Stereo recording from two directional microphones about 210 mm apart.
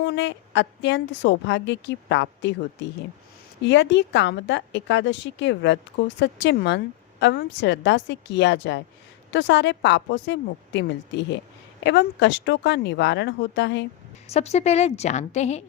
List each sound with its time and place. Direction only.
0.0 s a woman's voice: 55° left (ahead or behind)
3.6 s a woman's voice: 60° left (ahead or behind)
14.3 s a woman's voice: 30° left (ahead or behind)